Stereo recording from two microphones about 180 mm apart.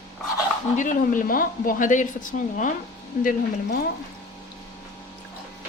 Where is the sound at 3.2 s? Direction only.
55° left (ahead or behind).